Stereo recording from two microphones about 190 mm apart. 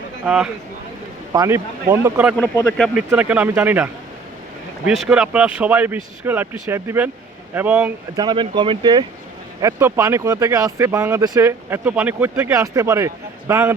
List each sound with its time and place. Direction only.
0.3 s speech: 5° right (ahead or behind)
1.3 s speech: 15° right (ahead or behind)
2.6 s speech: 5° left (ahead or behind)
3.1 s speech: 10° right (ahead or behind)
4.9 s speech: 5° right (ahead or behind)
8.1 s speech: 25° right (ahead or behind)